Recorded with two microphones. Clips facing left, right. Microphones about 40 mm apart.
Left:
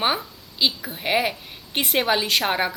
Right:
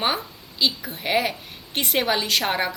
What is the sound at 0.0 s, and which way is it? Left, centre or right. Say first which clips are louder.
A woman's voice: left 1 dB; centre.